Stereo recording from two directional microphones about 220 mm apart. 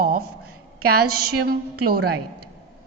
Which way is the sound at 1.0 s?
90° right.